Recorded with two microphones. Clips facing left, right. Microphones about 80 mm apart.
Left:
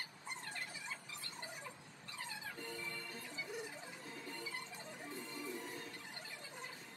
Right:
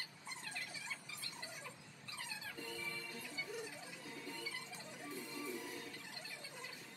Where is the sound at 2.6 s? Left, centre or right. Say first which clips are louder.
Even; left.